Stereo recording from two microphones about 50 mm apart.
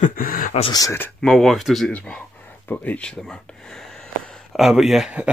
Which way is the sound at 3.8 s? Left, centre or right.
Centre.